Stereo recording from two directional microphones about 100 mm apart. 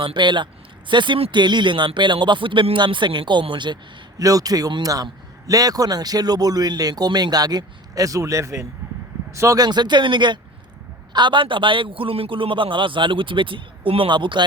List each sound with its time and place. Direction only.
0.0 s speech: 50° right (ahead or behind)
4.2 s a man's voice: 35° right (ahead or behind); by 14.4 s 55° right (ahead or behind)